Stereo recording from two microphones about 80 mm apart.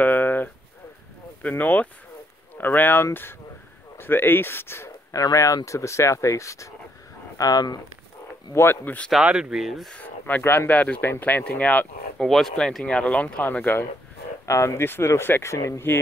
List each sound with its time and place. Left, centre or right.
0.0 s a sound: left
1.4 s speech: left
5.1 s speech: left
7.3 s speech: left
8.5 s speech: left
9.2 s speech: centre
9.9 s speech: left
10.7 s speech: centre
12.3 s speech: centre; by 13.6 s left
14.4 s speech: left